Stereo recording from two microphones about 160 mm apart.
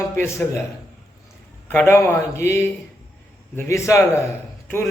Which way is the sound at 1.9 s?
15° left (ahead or behind).